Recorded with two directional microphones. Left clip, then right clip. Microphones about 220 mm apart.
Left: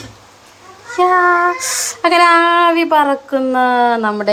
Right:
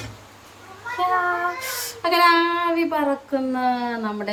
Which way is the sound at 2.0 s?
35° left (ahead or behind).